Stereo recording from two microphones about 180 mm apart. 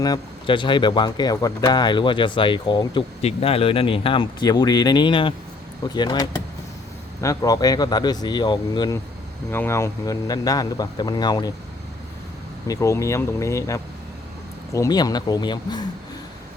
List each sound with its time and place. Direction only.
0.0 s speech: 25° left (ahead or behind)
9.5 s speech: 15° left (ahead or behind)
12.6 s speech: 20° left (ahead or behind)